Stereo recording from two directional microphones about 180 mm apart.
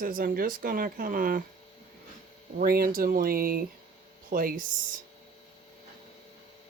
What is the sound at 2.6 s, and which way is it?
Speech, 55° right (ahead or behind).